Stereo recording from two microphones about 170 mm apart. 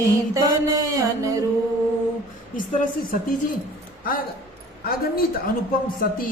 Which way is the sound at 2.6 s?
50° left (ahead or behind).